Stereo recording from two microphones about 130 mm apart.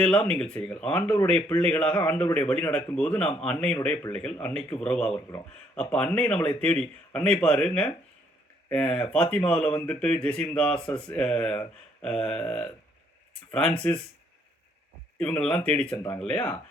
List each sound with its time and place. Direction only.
0.0 s speech: 10° left (ahead or behind)
12.0 s a sound: 5° left (ahead or behind)
13.5 s speech: 5° left (ahead or behind)
15.2 s speech: 5° left (ahead or behind)